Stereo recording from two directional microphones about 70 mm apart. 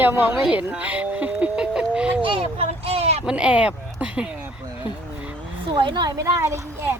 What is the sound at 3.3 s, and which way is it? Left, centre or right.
Speech, centre.